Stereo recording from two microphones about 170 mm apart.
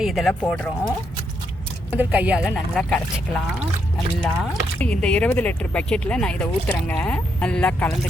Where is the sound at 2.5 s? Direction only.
5° left (ahead or behind).